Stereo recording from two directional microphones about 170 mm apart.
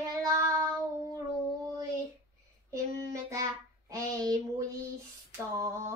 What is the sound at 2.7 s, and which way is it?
Child singing, 20° right (ahead or behind).